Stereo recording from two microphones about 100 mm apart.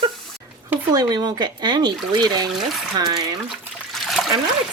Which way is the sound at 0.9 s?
40° right (ahead or behind).